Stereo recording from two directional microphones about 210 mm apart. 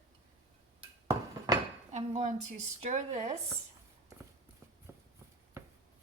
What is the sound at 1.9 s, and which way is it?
Speech, 35° right (ahead or behind).